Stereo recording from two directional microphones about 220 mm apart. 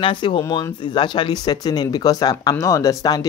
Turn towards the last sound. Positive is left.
turn(degrees=15)  # may be behind; listen again after turning